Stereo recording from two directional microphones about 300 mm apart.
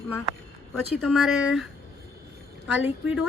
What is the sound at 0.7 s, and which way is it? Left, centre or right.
Speech, centre.